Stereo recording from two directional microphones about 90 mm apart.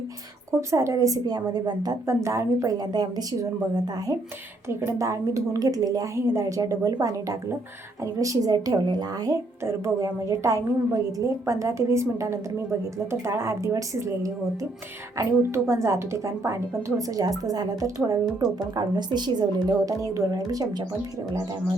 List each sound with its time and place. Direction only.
0.7 s speech: 35° right (ahead or behind)
1.4 s a woman's voice: 50° right (ahead or behind)
2.0 s a woman's voice: 30° right (ahead or behind); by 4.1 s 45° right (ahead or behind)
4.7 s a woman's voice: 35° right (ahead or behind)